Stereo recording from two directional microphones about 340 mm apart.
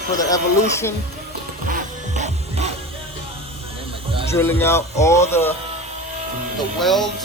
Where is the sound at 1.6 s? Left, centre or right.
Right.